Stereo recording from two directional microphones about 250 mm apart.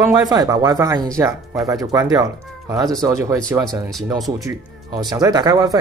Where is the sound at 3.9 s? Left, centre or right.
Centre.